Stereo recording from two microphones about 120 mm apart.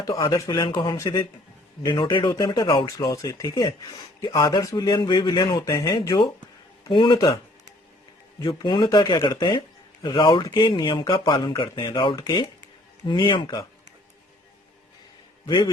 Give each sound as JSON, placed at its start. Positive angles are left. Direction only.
{"t": 0.0, "sound": "speech", "side_deg": 30}
{"t": 0.5, "sound": "speech", "side_deg": 40}
{"t": 8.4, "sound": "speech", "side_deg": 40}
{"t": 15.4, "sound": "speech", "side_deg": 40}